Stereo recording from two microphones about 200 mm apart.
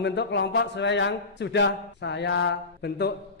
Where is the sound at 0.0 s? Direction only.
60° left (ahead or behind).